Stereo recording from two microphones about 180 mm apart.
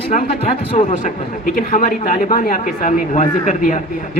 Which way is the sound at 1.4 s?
50° left (ahead or behind).